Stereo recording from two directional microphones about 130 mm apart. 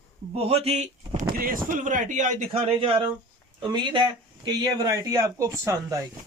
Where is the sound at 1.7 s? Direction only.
80° right.